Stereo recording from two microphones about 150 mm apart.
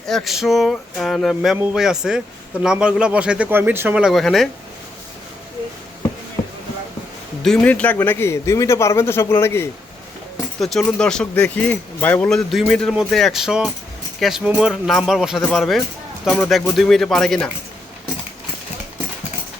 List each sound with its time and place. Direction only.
0.0 s a man's voice: centre (ahead or behind)
7.4 s speech: 5° left (ahead or behind)
10.6 s a man's voice: centre (ahead or behind)